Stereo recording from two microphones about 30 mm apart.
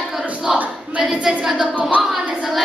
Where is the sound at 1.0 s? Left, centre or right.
Centre.